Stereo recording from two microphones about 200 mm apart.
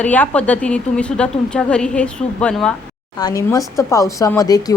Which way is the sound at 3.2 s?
20° left (ahead or behind).